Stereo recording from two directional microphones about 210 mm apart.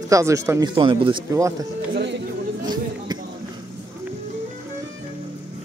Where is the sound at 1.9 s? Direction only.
55° right (ahead or behind).